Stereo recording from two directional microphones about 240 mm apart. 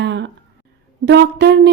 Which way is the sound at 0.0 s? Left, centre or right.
Right.